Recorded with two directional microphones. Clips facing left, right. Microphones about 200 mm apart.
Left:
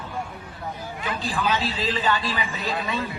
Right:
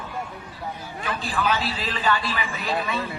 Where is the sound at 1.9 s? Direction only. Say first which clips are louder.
Right 2 dB; 20° left (ahead or behind).